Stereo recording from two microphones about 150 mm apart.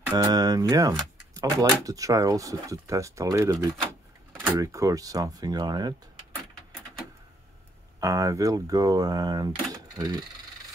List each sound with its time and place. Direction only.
0.1 s speech: 25° right (ahead or behind)
8.0 s speech: 20° right (ahead or behind)